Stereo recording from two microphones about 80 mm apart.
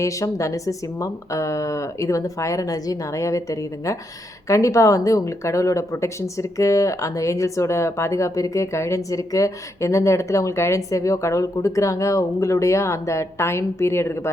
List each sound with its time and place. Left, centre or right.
0.0 s speech: left